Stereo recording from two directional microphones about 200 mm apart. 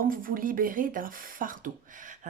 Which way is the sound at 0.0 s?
45° right (ahead or behind).